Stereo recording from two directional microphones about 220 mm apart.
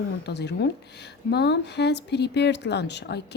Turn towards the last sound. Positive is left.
turn(degrees=50)  # may be behind; listen again after turning